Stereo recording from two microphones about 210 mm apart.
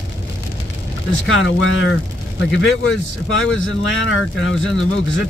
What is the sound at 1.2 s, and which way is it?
Speech, 70° left (ahead or behind).